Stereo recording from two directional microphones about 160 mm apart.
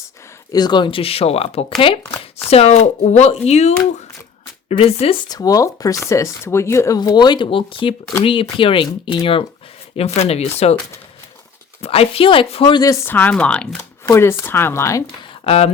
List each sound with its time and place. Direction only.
0.5 s speech: 25° left (ahead or behind)
5.3 s speech: 25° left (ahead or behind); by 10.8 s 40° left (ahead or behind)
11.8 s speech: 35° left (ahead or behind); by 15.0 s 20° left (ahead or behind)
15.0 s speech: 40° left (ahead or behind)